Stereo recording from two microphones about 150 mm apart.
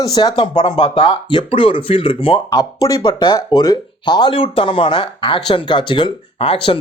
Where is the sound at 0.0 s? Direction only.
25° left (ahead or behind).